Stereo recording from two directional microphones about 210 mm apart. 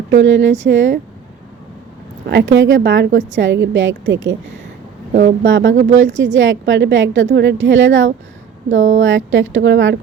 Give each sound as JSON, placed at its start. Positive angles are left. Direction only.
{"t": 0.1, "sound": "a woman's voice", "side_deg": -60}
{"t": 2.2, "sound": "a woman's voice", "side_deg": -55}
{"t": 5.4, "sound": "a woman's voice", "side_deg": -60}
{"t": 5.7, "sound": "speech", "side_deg": -35}
{"t": 6.1, "sound": "a woman's voice", "side_deg": -60}